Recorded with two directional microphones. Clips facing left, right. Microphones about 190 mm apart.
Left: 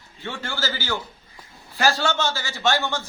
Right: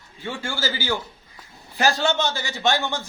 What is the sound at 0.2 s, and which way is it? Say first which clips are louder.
A man's voice: right 1 dB; 10° right (ahead or behind).